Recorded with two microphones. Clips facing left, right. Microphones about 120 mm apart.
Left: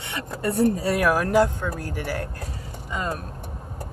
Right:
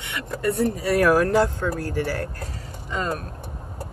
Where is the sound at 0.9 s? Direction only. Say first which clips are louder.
Right 4 dB; 5° left (ahead or behind).